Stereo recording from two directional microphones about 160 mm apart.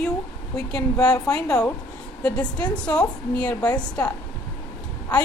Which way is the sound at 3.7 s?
25° left (ahead or behind).